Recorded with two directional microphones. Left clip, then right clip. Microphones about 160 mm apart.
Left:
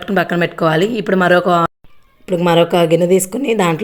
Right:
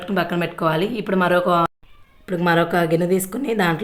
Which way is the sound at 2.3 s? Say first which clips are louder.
Left 6 dB; 20° left (ahead or behind).